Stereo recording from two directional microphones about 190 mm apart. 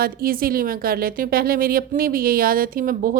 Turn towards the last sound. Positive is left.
turn(degrees=-50)  # may be behind; listen again after turning